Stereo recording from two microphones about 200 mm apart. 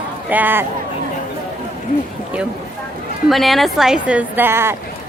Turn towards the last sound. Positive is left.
turn(degrees=-10)  # may be behind; listen again after turning